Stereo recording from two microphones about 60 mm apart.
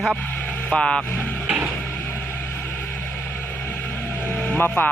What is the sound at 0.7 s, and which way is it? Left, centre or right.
Mantra, centre.